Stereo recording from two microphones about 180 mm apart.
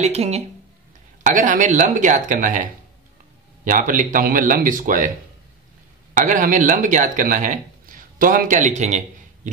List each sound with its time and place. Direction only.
0.0 s speech: 35° right (ahead or behind)
6.1 s speech: 45° right (ahead or behind)